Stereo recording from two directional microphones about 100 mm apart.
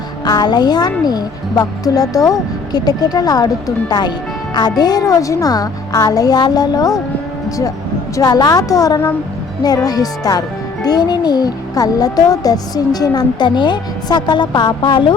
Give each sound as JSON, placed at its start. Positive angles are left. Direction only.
{"t": 0.3, "sound": "speech", "side_deg": 45}
{"t": 8.1, "sound": "a child's voice", "side_deg": 40}